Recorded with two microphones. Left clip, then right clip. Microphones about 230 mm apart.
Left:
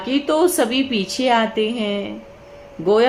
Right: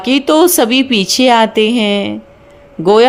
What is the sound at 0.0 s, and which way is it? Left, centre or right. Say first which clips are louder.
A woman's voice: right 8 dB; right.